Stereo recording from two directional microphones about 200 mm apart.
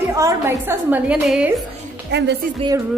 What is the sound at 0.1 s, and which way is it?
A woman's voice, 15° right (ahead or behind).